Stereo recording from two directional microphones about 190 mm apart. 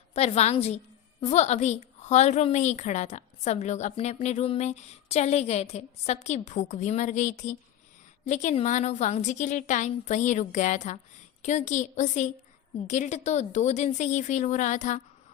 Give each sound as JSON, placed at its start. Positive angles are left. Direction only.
{"t": 0.1, "sound": "a woman's voice", "side_deg": 35}